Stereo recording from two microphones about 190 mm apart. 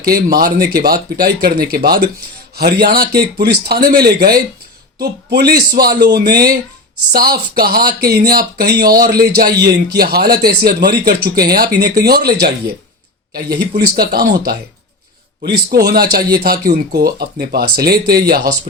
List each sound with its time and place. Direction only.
0.0 s speech: 50° right (ahead or behind)
15.7 s speech: 55° right (ahead or behind)